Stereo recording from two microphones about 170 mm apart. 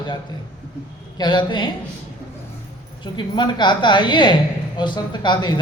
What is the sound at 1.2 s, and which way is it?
Speech, 25° left (ahead or behind).